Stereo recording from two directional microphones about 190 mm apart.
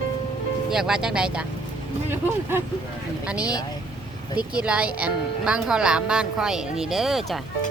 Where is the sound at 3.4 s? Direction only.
20° left (ahead or behind).